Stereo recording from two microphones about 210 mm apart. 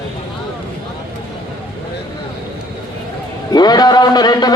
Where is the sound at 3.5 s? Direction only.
20° left (ahead or behind).